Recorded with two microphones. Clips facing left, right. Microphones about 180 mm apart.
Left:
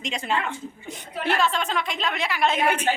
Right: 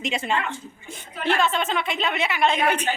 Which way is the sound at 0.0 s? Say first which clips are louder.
Right 2 dB; 5° right (ahead or behind).